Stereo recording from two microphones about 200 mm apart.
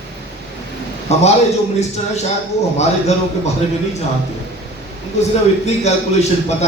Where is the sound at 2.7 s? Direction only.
35° left (ahead or behind).